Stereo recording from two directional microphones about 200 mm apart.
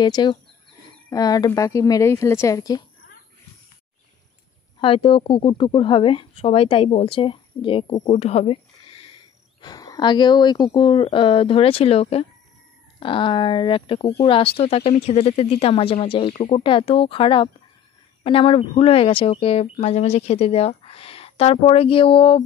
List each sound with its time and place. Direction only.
0.0 s speech: 20° left (ahead or behind)
4.7 s speech: 25° left (ahead or behind)